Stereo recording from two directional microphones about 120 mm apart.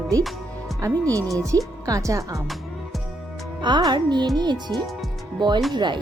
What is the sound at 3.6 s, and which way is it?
Speech, 40° right (ahead or behind).